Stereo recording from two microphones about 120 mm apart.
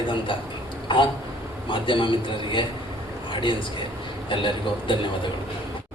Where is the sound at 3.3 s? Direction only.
45° left (ahead or behind).